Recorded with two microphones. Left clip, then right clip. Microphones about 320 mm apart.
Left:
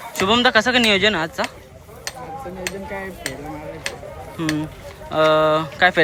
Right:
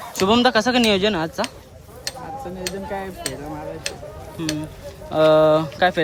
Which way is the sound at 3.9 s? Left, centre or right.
Centre.